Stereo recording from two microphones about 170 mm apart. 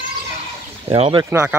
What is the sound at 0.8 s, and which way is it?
Speech, 35° right (ahead or behind).